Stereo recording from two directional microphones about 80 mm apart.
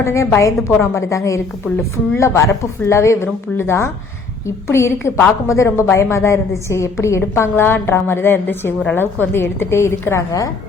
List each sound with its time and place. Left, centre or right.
0.0 s a woman's voice: left